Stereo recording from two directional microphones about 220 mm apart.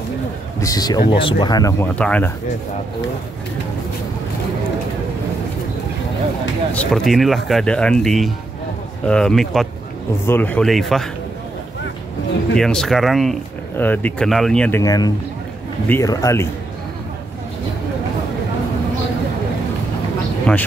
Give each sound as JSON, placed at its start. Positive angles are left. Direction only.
{"t": 0.6, "sound": "speech", "side_deg": 15}
{"t": 6.7, "sound": "speech", "side_deg": 5}
{"t": 12.5, "sound": "speech", "side_deg": 0}
{"t": 14.8, "sound": "speech", "side_deg": 15}